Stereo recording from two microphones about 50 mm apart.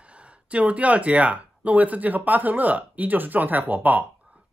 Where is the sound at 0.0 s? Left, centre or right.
Right.